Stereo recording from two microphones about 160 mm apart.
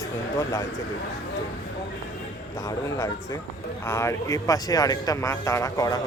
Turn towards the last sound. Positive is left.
turn(degrees=20)  # may be behind; listen again after turning